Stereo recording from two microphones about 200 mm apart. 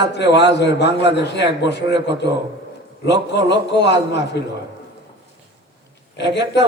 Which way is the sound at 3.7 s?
60° left (ahead or behind).